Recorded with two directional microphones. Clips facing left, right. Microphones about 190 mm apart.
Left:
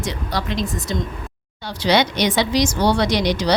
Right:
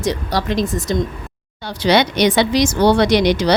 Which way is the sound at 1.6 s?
55° right (ahead or behind).